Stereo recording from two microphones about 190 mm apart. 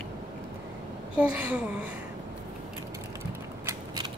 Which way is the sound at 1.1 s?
5° right (ahead or behind).